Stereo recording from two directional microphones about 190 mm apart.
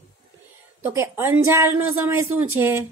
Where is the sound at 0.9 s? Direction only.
15° right (ahead or behind).